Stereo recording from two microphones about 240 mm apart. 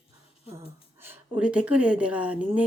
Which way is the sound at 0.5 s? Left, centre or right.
Centre.